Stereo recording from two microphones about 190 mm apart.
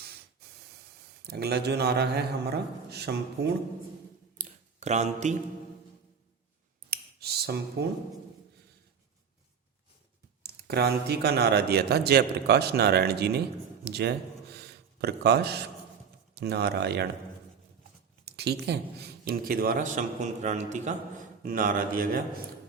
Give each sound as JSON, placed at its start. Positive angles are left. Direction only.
{"t": 1.2, "sound": "a man's voice", "side_deg": -60}
{"t": 4.4, "sound": "a sound", "side_deg": -40}
{"t": 6.9, "sound": "finger snapping", "side_deg": -55}
{"t": 10.4, "sound": "a man's voice", "side_deg": -55}
{"t": 18.3, "sound": "a man's voice", "side_deg": -60}